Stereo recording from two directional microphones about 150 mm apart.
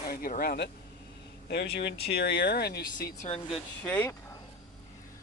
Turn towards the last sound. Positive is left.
turn(degrees=10)  # may be behind; listen again after turning